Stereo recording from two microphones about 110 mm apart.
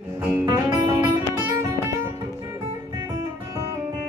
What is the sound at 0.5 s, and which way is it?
Music, 35° right (ahead or behind).